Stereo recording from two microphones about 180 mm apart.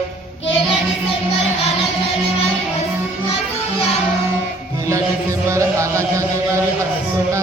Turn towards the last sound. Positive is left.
turn(degrees=-15)  # may be behind; listen again after turning